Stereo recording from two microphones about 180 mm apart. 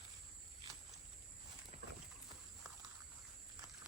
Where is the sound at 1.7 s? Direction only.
40° right (ahead or behind).